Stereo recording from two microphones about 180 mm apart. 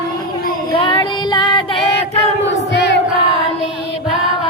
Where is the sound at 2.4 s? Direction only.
75° left (ahead or behind).